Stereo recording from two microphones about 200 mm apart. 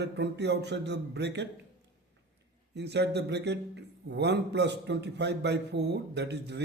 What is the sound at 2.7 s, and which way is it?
A man's voice, 55° right (ahead or behind).